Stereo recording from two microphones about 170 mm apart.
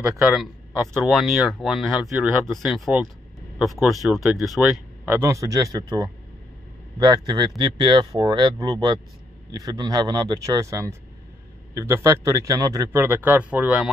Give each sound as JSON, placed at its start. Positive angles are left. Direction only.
{"t": 0.1, "sound": "speech", "side_deg": 0}
{"t": 5.0, "sound": "a man's voice", "side_deg": -15}